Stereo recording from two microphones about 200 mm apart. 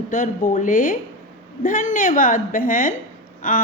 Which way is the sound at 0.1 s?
40° left (ahead or behind).